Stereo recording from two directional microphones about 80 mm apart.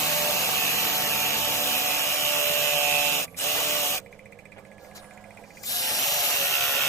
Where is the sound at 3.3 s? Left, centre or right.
Left.